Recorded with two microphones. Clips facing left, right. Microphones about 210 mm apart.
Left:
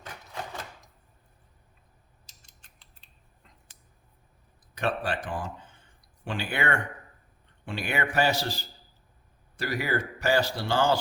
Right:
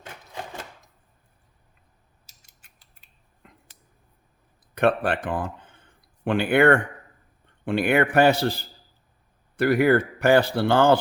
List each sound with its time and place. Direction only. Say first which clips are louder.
2.5 s mechanisms: left 1 dB; 5° right (ahead or behind)
3.4 s a sound: right 9 dB; 60° right (ahead or behind)
4.7 s speech: right 8 dB; 60° right (ahead or behind)